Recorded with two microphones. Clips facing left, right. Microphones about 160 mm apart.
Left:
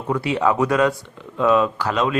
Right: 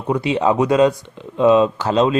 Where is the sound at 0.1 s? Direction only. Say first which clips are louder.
Right 3 dB; 20° right (ahead or behind).